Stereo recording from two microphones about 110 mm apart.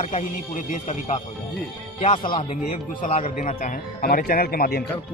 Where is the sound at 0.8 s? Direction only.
90° left.